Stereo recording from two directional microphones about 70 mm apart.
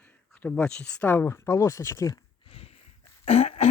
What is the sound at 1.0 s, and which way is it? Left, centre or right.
Speech, left.